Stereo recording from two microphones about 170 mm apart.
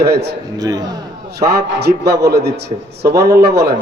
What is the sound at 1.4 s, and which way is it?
Speech, 70° right (ahead or behind).